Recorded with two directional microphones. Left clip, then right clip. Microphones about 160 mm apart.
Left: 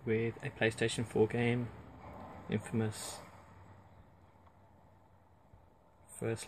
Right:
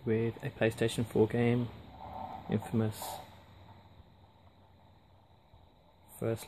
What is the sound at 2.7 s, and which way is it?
Speech, 10° right (ahead or behind).